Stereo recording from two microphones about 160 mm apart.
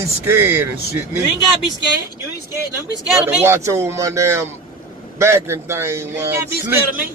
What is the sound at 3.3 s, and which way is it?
Speech, 15° right (ahead or behind).